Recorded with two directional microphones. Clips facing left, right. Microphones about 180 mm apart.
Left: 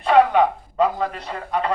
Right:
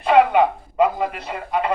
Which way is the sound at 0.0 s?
10° right (ahead or behind).